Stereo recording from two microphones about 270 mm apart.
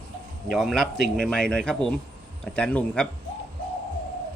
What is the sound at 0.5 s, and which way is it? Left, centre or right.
A man's voice, centre.